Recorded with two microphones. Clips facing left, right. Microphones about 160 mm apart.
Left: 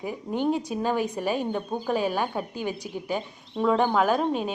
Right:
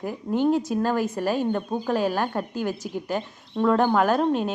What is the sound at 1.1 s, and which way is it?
Speech, 5° right (ahead or behind).